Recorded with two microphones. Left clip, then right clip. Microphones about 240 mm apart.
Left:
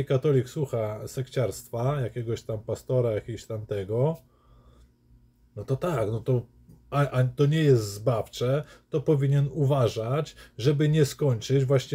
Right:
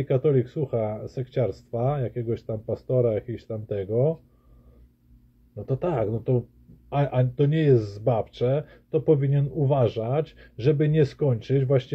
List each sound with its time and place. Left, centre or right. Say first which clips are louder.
0.0 s speech: right 2 dB; centre
5.7 s speech: right 2 dB; centre